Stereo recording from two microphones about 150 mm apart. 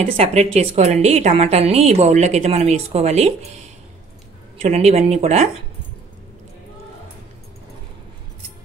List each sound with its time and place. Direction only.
0.0 s a woman's voice: 40° right (ahead or behind)
4.6 s a woman's voice: 45° right (ahead or behind)